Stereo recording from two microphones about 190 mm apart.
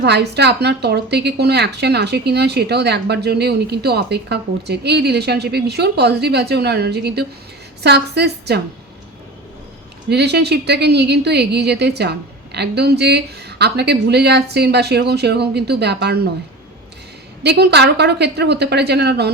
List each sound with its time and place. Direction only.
0.0 s a woman's voice: 60° right (ahead or behind)
10.1 s a woman's voice: 60° right (ahead or behind)
17.4 s a woman's voice: 60° right (ahead or behind)